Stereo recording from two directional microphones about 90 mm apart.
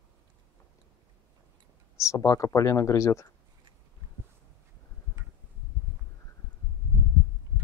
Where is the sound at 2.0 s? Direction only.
35° left (ahead or behind).